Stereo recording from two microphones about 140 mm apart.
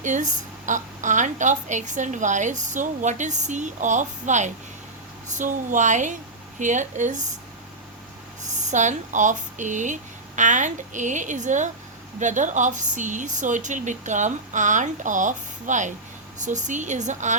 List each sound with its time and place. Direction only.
0.0 s a woman's voice: 60° right (ahead or behind)
8.6 s a woman's voice: 60° right (ahead or behind)